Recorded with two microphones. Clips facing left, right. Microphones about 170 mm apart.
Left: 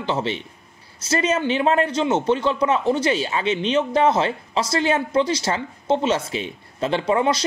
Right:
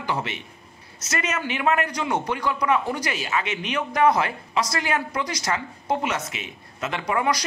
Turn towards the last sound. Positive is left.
turn(degrees=25)  # may be behind; listen again after turning